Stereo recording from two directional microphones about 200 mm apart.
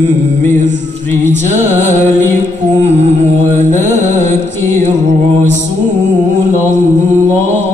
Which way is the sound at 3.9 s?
35° right (ahead or behind).